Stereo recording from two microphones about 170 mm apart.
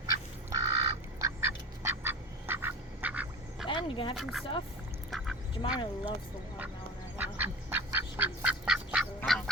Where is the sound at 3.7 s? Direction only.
30° left (ahead or behind).